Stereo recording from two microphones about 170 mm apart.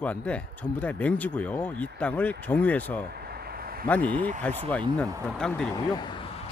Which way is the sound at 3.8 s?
10° left (ahead or behind).